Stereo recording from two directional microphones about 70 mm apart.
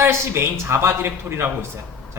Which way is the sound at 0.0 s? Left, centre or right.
Right.